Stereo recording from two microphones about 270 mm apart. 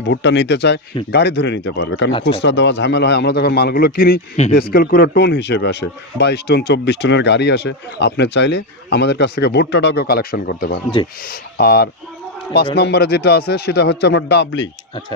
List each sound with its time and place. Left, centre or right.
0.1 s speech: left